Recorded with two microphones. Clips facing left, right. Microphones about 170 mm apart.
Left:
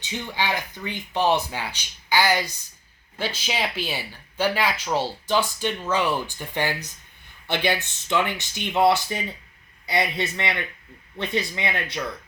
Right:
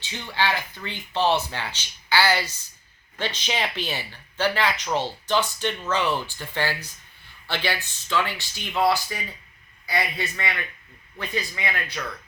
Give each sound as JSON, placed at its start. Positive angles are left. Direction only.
{"t": 0.0, "sound": "speech", "side_deg": 15}